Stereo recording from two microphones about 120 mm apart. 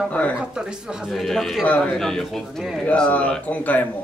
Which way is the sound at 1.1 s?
Centre (ahead or behind).